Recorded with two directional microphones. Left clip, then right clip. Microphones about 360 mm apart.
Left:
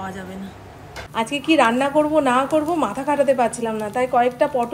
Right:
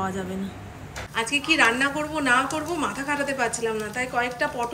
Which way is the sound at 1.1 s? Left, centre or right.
Centre.